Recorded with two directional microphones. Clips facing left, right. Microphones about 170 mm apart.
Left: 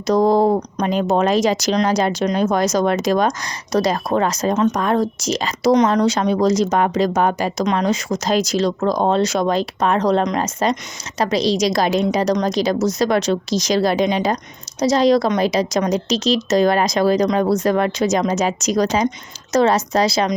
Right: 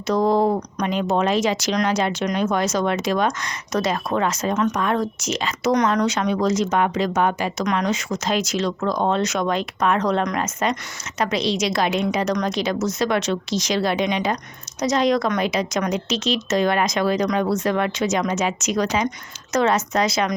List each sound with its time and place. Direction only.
0.1 s speech: 40° left (ahead or behind)